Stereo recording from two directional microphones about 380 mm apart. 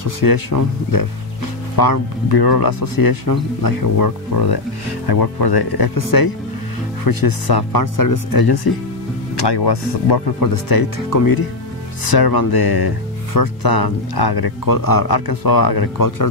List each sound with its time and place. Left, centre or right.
0.0 s speech: left
9.4 s speech: left